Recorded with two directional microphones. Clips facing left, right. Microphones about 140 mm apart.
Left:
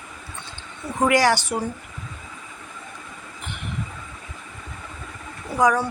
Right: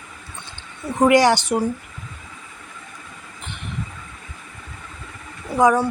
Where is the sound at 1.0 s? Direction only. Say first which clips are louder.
Right 4 dB; 20° right (ahead or behind).